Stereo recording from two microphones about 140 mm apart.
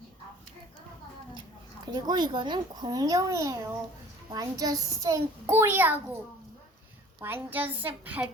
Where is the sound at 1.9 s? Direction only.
30° right (ahead or behind); by 6.1 s 10° right (ahead or behind).